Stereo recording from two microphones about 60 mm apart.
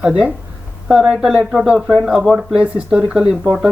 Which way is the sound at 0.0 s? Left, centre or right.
Centre.